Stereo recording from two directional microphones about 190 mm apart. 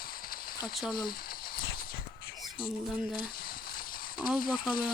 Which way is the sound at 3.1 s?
50° left (ahead or behind).